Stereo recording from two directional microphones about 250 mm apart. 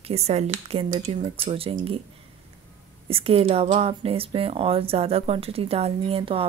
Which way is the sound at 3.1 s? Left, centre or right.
Right.